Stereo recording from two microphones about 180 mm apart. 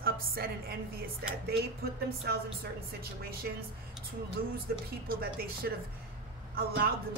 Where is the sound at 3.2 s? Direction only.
60° right (ahead or behind).